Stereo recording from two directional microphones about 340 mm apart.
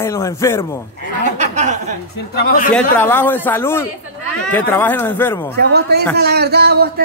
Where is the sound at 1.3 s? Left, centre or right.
Right.